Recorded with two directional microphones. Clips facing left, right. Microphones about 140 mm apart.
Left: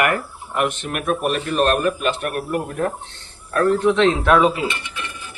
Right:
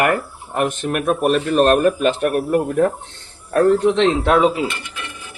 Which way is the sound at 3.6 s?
25° right (ahead or behind).